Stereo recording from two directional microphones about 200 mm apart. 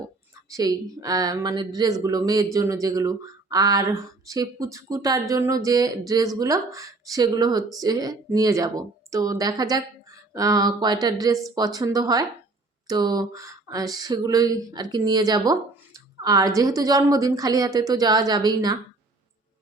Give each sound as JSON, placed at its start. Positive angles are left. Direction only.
{"t": 0.5, "sound": "speech", "side_deg": -20}
{"t": 10.3, "sound": "a sound", "side_deg": -20}
{"t": 16.6, "sound": "speech", "side_deg": -20}